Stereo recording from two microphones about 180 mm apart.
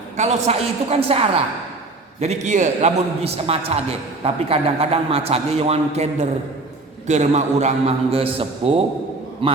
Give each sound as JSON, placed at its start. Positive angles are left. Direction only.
{"t": 0.2, "sound": "a man's voice", "side_deg": -40}